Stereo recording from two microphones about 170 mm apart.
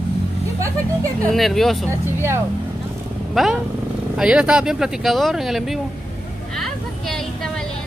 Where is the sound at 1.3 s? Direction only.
Centre (ahead or behind).